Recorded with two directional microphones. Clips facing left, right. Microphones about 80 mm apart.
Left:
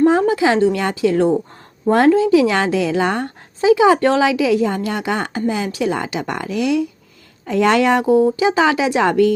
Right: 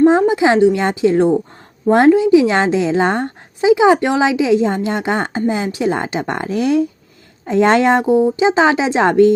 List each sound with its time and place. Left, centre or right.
0.0 s a woman's voice: right